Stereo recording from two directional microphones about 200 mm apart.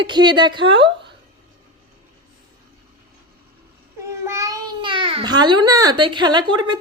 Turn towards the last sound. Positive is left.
turn(degrees=-25)  # may be behind; listen again after turning